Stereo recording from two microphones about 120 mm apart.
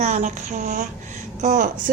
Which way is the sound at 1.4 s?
80° right.